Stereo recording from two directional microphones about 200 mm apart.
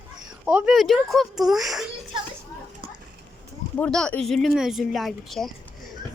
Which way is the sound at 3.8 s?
5° left (ahead or behind).